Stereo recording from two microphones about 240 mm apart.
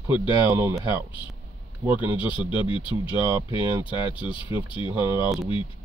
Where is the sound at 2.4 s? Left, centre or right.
Left.